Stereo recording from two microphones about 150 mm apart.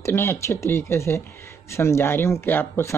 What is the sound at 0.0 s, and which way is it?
Speech, 15° left (ahead or behind).